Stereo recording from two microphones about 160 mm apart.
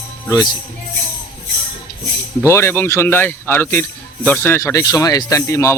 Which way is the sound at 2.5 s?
15° left (ahead or behind).